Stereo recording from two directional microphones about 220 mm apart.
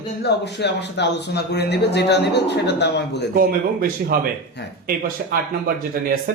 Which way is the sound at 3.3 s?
40° right (ahead or behind).